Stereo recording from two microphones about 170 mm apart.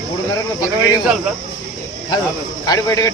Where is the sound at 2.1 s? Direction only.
25° left (ahead or behind).